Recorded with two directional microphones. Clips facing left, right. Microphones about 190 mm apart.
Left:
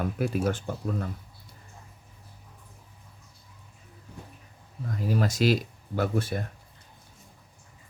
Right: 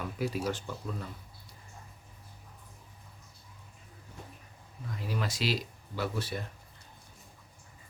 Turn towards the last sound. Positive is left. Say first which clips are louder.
# left 7 dB
turn(degrees=50)  # may be behind; listen again after turning